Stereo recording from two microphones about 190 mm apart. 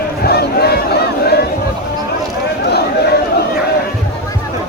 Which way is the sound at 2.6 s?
60° left (ahead or behind).